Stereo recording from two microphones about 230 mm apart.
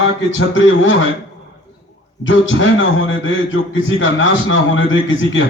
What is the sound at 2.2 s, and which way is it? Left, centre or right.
A man's voice, left.